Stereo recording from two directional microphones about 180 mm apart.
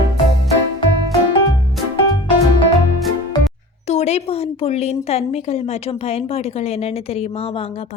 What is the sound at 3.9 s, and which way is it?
A woman's voice, 40° left (ahead or behind).